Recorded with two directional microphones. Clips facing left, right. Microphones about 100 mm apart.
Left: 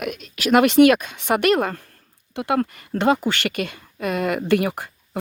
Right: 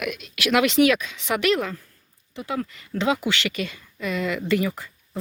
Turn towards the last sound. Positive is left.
turn(degrees=70)  # may be behind; listen again after turning